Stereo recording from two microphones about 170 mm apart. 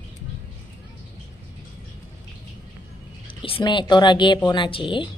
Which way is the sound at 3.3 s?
30° left (ahead or behind).